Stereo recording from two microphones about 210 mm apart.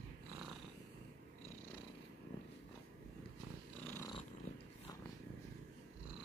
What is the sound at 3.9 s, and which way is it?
Purr, 20° left (ahead or behind).